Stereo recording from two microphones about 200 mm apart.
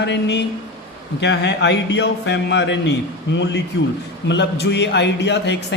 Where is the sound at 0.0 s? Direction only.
60° left (ahead or behind).